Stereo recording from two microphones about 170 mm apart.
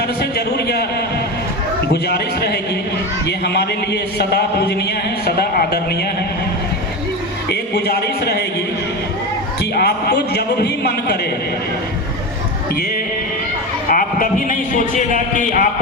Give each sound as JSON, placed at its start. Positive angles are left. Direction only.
{"t": 0.2, "sound": "a sound", "side_deg": 70}
{"t": 1.9, "sound": "a man's voice", "side_deg": 70}
{"t": 7.5, "sound": "a man's voice", "side_deg": 70}
{"t": 9.7, "sound": "a man's voice", "side_deg": 70}
{"t": 13.9, "sound": "a man's voice", "side_deg": 55}